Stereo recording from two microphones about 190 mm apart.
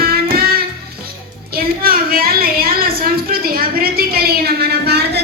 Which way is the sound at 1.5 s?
50° right (ahead or behind).